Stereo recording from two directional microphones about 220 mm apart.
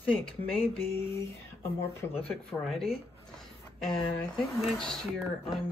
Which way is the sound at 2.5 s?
Centre (ahead or behind).